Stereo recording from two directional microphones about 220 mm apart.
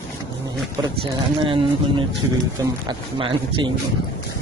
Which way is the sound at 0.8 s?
25° right (ahead or behind).